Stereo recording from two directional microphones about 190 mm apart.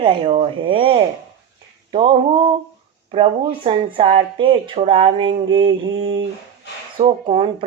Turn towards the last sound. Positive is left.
turn(degrees=-25)  # may be behind; listen again after turning